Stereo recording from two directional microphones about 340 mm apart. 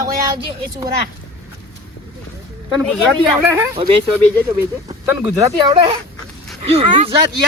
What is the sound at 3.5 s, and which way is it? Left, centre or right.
Speech, centre.